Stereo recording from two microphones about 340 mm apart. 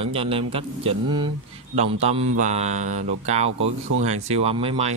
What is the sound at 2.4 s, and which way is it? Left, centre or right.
Mantra, centre.